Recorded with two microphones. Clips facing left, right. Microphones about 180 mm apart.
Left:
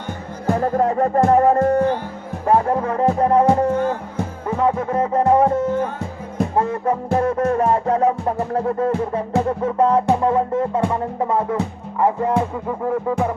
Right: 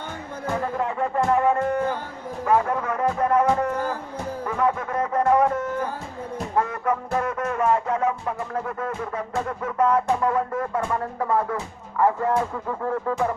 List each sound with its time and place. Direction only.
0.6 s music: 40° left (ahead or behind); by 13.3 s 15° left (ahead or behind)